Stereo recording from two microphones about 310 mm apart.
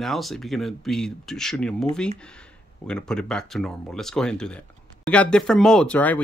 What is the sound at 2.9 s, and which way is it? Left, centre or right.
Speech, centre.